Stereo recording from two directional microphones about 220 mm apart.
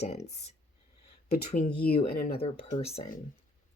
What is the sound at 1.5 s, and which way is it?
Speech, 40° left (ahead or behind).